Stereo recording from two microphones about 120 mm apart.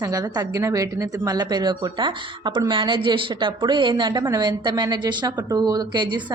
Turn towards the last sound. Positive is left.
turn(degrees=-40)  # may be behind; listen again after turning